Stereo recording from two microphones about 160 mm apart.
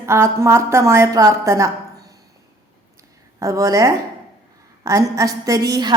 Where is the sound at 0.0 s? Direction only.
15° right (ahead or behind).